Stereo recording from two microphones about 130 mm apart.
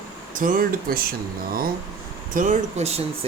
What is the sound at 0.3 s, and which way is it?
Speech, 90° right.